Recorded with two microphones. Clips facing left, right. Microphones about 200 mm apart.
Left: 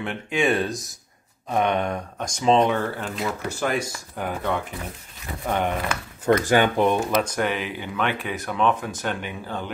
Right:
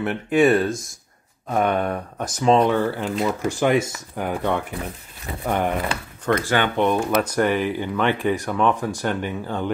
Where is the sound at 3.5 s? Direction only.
20° right (ahead or behind).